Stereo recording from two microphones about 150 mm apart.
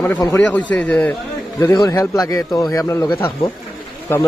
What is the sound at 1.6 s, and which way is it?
A man's voice, 20° left (ahead or behind).